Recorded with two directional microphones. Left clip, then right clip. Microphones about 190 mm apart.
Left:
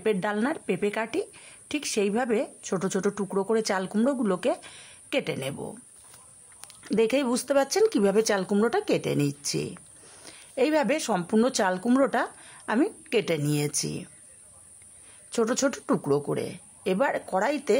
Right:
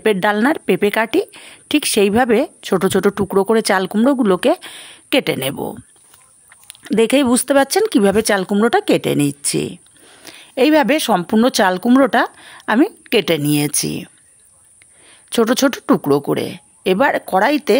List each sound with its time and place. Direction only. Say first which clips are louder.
0.0 s a woman's voice: right 11 dB; 45° right (ahead or behind)
6.7 s speech: right 9 dB; 35° right (ahead or behind)
15.0 s speech: right 11 dB; 35° right (ahead or behind)